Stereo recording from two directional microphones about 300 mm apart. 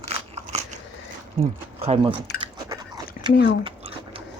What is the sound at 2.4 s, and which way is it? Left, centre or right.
Dog, centre.